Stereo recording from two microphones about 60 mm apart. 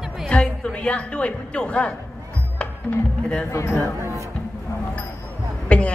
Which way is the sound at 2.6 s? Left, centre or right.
Centre.